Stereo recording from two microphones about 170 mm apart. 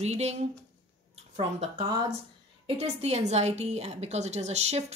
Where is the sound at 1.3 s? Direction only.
40° right (ahead or behind).